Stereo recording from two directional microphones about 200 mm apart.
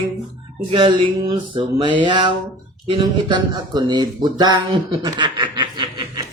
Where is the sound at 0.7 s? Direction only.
25° right (ahead or behind).